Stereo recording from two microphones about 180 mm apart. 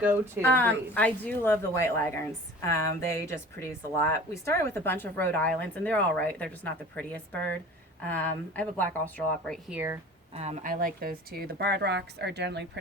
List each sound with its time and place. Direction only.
0.4 s speech: 10° left (ahead or behind)
9.6 s speech: 10° right (ahead or behind)
10.3 s a woman's voice: 35° right (ahead or behind); by 12.6 s 70° right (ahead or behind)